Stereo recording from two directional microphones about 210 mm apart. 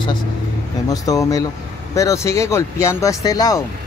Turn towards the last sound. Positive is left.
turn(degrees=15)  # may be behind; listen again after turning